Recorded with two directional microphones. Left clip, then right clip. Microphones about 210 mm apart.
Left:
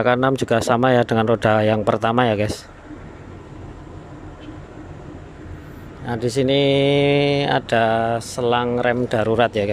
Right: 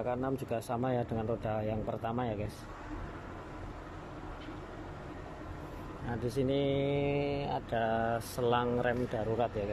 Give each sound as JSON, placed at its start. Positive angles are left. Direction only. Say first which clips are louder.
{"t": 0.0, "sound": "speech", "louder": "left 17 dB", "side_deg": 30}
{"t": 1.1, "sound": "speech", "louder": "left 18 dB", "side_deg": 40}
{"t": 6.0, "sound": "speech", "louder": "left 14 dB", "side_deg": 25}
{"t": 7.8, "sound": "speech", "louder": "left 13 dB", "side_deg": 20}